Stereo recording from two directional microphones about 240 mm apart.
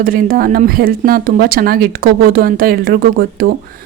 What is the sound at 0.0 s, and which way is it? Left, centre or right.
A woman's voice, right.